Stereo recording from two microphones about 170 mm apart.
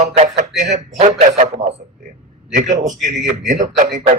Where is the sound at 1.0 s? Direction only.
40° right (ahead or behind).